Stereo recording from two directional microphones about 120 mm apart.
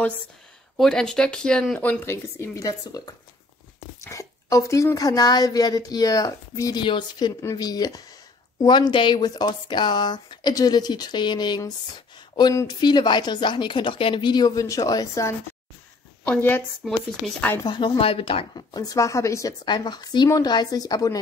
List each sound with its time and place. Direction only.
0.7 s speech: 5° left (ahead or behind)
2.3 s a woman's voice: 25° left (ahead or behind)
6.8 s speech: 40° left (ahead or behind)
16.3 s a woman's voice: 15° left (ahead or behind)
16.8 s speech: centre (ahead or behind)
17.6 s speech: 40° left (ahead or behind)
18.7 s a woman's voice: 30° left (ahead or behind)
19.6 s speech: 35° left (ahead or behind)